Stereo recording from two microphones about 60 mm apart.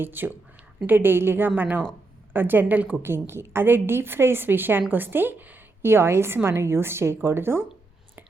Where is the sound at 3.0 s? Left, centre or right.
Right.